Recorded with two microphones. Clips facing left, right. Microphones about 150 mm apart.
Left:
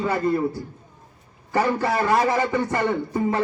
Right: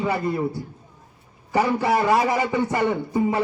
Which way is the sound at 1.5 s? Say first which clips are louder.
Right 1 dB; 15° right (ahead or behind).